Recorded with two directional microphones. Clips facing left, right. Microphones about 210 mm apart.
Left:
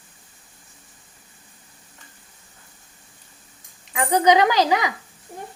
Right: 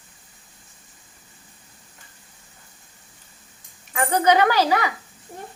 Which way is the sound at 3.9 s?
15° left (ahead or behind).